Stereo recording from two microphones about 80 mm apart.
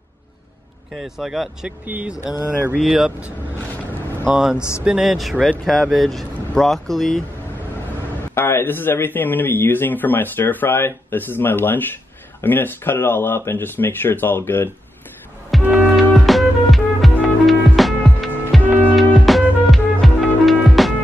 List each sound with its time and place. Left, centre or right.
0.9 s speech: centre
1.9 s speech: centre
2.8 s speech: centre
4.3 s speech: centre
8.4 s speech: left
15.5 s music: centre